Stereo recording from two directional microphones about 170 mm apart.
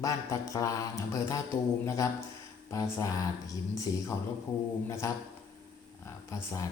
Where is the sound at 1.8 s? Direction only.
15° left (ahead or behind).